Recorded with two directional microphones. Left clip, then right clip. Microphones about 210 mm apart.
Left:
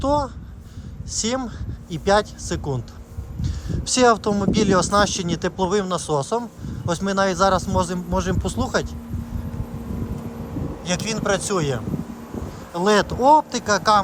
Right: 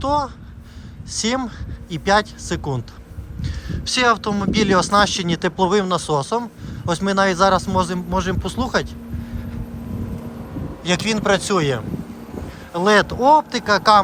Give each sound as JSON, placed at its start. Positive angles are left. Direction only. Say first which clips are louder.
{"t": 0.0, "sound": "speech", "louder": "right 1 dB", "side_deg": 20}
{"t": 10.8, "sound": "speech", "louder": "right 5 dB", "side_deg": 10}